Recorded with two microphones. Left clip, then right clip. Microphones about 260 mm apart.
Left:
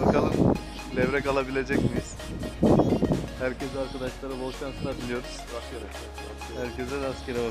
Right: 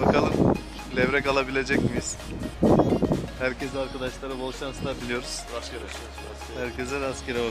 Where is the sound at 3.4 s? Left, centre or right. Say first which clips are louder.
Right 2 dB; centre.